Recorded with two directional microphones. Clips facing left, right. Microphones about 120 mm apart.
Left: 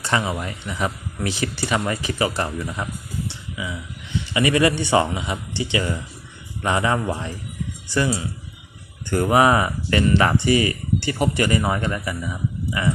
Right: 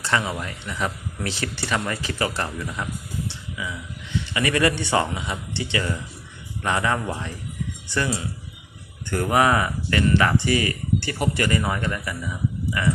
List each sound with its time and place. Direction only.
0.2 s speech: 15° left (ahead or behind)
3.2 s a sound: 15° left (ahead or behind)
4.4 s speech: 15° left (ahead or behind)